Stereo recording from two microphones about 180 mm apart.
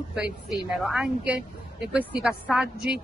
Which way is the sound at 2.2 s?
5° right (ahead or behind).